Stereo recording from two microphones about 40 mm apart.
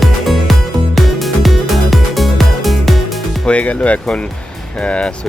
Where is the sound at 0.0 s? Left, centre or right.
Centre.